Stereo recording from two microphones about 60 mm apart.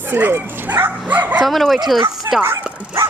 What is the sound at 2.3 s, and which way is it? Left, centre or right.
Speech, right.